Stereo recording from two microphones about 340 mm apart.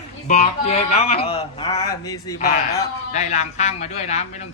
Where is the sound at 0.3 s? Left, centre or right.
Centre.